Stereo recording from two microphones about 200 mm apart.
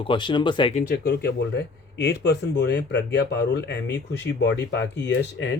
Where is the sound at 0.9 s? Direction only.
55° left (ahead or behind).